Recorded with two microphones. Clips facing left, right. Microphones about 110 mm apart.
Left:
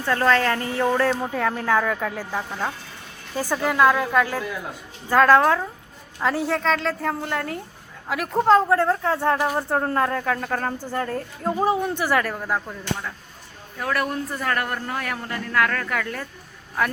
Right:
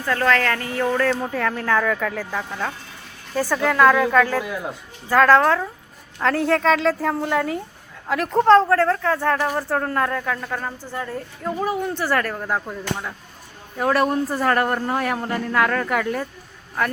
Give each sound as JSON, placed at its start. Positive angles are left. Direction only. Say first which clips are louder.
{"t": 0.0, "sound": "speech", "louder": "even", "side_deg": 20}
{"t": 6.1, "sound": "a woman's voice", "louder": "right 3 dB", "side_deg": 5}
{"t": 11.4, "sound": "speech", "louder": "left 2 dB", "side_deg": 25}
{"t": 11.9, "sound": "speech", "louder": "even", "side_deg": 10}
{"t": 12.5, "sound": "a sound", "louder": "right 2 dB", "side_deg": -15}
{"t": 13.7, "sound": "a man's voice", "louder": "right 6 dB", "side_deg": -25}